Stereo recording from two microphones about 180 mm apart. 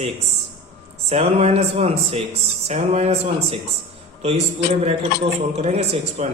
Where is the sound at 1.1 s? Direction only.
35° right (ahead or behind).